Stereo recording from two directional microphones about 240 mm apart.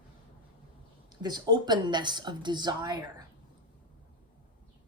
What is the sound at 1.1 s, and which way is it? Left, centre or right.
Speech, centre.